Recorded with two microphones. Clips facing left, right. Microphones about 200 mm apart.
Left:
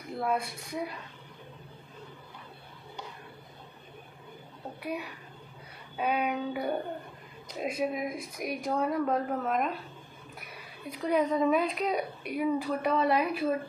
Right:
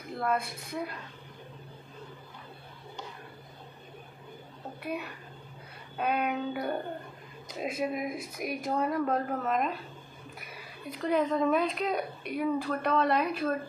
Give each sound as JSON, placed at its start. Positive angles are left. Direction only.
{"t": 0.2, "sound": "speech", "side_deg": 0}
{"t": 4.8, "sound": "speech", "side_deg": 0}